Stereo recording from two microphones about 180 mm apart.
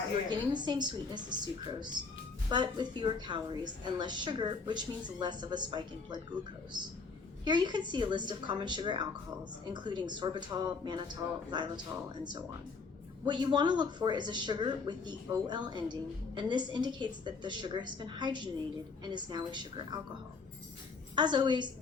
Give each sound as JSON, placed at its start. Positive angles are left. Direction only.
{"t": 0.3, "sound": "speech", "side_deg": -25}
{"t": 7.4, "sound": "speech", "side_deg": -25}
{"t": 13.2, "sound": "speech", "side_deg": -25}
{"t": 21.2, "sound": "speech", "side_deg": -25}